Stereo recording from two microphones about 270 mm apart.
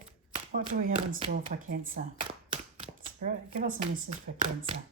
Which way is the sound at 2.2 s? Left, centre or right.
Right.